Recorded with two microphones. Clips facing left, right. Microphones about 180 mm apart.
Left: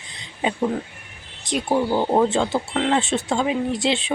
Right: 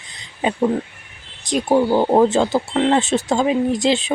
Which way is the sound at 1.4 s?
40° right (ahead or behind).